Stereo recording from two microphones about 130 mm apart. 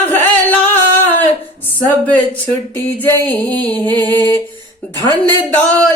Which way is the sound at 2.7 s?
15° left (ahead or behind).